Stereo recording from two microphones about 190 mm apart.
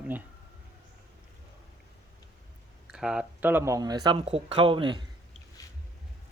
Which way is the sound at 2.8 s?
5° right (ahead or behind).